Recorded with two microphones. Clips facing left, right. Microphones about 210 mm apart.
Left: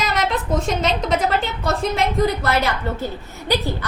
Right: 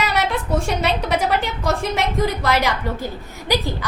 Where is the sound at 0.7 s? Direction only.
65° right (ahead or behind).